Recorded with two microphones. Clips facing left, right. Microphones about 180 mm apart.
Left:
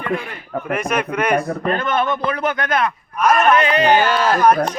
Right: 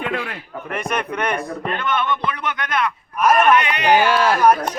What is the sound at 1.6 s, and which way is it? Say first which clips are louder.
Speech: left 3 dB; 40° left (ahead or behind).